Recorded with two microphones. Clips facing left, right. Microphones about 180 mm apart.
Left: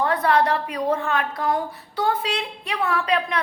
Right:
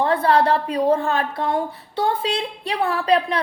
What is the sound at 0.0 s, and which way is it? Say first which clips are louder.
A woman's voice: right 2 dB; 30° right (ahead or behind).